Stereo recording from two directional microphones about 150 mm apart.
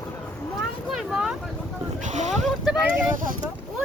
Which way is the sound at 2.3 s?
5° right (ahead or behind).